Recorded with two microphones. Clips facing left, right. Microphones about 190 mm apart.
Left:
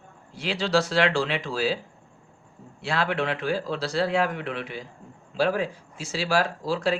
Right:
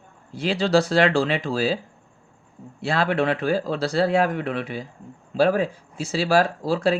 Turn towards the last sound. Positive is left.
turn(degrees=-40)  # may be behind; listen again after turning